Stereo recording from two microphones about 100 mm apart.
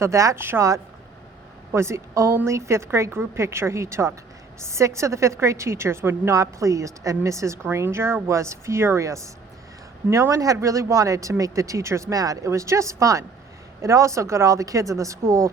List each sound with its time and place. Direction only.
0.0 s a woman's voice: 30° right (ahead or behind)